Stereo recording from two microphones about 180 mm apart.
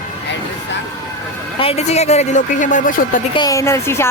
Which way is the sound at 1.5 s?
35° left (ahead or behind).